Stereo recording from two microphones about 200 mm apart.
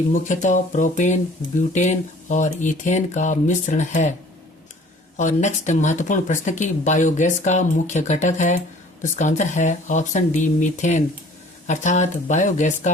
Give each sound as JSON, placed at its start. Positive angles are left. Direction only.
{"t": 0.1, "sound": "speech", "side_deg": 40}
{"t": 5.1, "sound": "speech", "side_deg": 35}